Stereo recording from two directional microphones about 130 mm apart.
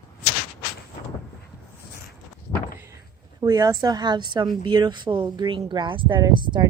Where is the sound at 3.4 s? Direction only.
30° right (ahead or behind).